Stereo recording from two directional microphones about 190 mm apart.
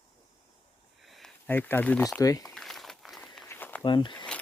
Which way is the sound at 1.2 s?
10° left (ahead or behind).